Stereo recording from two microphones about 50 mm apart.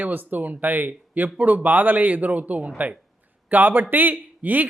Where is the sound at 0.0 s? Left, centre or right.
Right.